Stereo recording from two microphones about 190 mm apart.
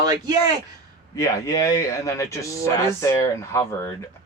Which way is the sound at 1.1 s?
15° left (ahead or behind).